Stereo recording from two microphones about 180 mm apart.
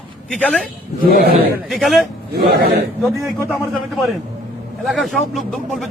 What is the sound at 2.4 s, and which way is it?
Speech, 60° right (ahead or behind).